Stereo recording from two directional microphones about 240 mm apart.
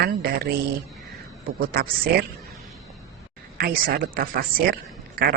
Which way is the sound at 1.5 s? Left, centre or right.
Right.